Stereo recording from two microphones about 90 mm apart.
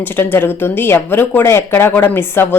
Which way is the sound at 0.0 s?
20° left (ahead or behind).